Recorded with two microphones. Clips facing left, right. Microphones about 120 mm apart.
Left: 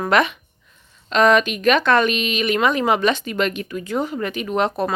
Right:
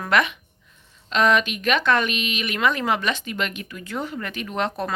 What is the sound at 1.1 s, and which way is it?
Speech, 45° left (ahead or behind).